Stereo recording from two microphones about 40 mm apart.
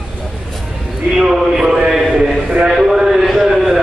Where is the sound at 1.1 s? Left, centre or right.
Centre.